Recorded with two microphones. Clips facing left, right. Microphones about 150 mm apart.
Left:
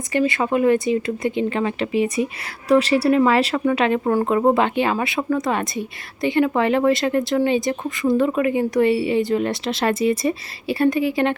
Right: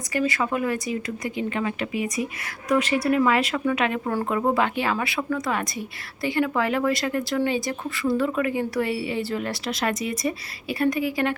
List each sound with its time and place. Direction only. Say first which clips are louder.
0.1 s speech: left 5 dB; 25° left (ahead or behind)